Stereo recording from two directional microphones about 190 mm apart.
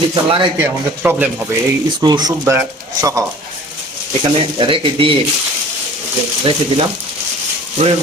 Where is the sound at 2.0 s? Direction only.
20° right (ahead or behind).